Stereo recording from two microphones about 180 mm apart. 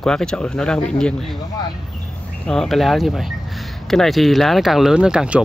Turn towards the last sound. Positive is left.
turn(degrees=-5)  # may be behind; listen again after turning